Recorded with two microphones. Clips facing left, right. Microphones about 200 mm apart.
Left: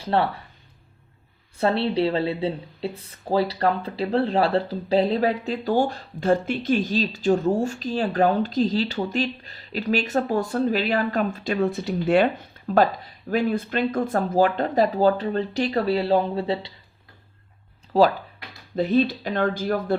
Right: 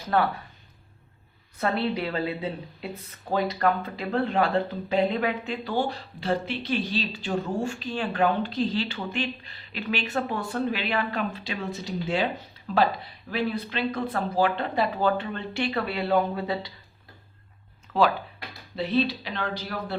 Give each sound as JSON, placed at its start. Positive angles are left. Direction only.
{"t": 0.0, "sound": "speech", "side_deg": 30}
{"t": 1.5, "sound": "speech", "side_deg": 30}
{"t": 17.9, "sound": "a sound", "side_deg": 35}
{"t": 18.8, "sound": "speech", "side_deg": 45}